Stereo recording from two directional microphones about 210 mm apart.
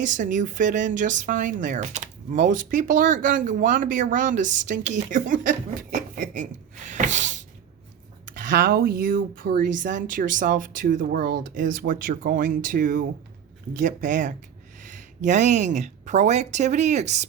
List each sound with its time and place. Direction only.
0.0 s speech: 40° right (ahead or behind)